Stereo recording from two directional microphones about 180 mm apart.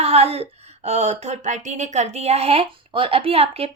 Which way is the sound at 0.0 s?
35° right (ahead or behind).